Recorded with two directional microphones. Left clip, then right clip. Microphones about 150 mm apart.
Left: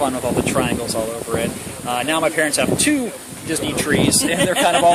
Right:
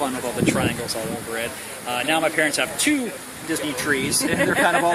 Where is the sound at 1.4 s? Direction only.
45° left (ahead or behind).